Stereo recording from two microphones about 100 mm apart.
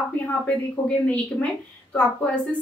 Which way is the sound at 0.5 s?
15° left (ahead or behind).